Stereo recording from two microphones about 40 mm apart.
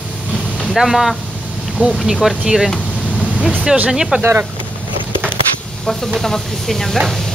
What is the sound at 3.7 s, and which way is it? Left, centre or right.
Speech, centre.